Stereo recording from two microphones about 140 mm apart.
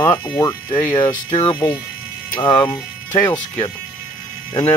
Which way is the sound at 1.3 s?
45° left (ahead or behind).